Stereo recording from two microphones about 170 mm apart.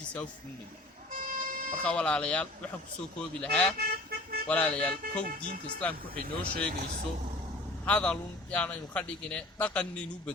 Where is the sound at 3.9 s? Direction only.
65° right (ahead or behind).